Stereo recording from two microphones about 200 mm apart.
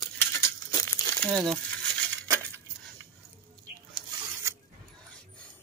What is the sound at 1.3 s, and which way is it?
Speech, centre (ahead or behind).